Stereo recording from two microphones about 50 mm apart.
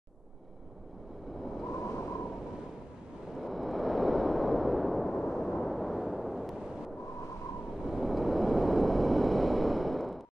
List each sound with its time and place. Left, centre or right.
1.7 s waves: left
3.3 s a sound: centre
7.8 s vehicle: centre